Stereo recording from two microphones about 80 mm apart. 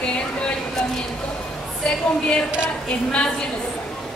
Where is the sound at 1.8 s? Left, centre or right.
Centre.